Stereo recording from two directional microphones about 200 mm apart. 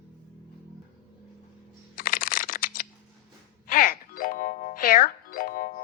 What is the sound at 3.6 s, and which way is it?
Music, 45° left (ahead or behind).